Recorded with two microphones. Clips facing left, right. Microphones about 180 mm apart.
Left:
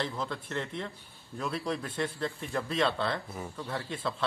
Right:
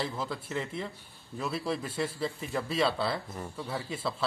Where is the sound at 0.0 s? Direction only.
5° right (ahead or behind).